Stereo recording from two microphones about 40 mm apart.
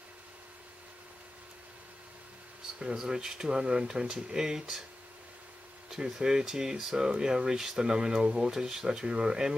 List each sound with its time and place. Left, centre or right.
2.8 s speech: centre
5.9 s a sound: centre
6.1 s speech: centre